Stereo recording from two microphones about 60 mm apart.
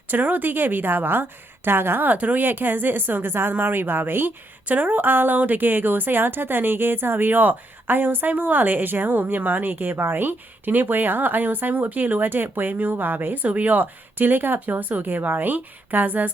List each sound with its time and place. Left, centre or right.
0.1 s a woman's voice: right